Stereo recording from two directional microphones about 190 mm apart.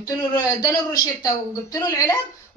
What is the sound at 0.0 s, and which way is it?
A man's voice, 20° left (ahead or behind).